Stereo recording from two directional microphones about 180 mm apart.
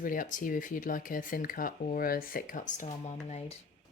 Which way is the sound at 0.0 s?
50° left (ahead or behind).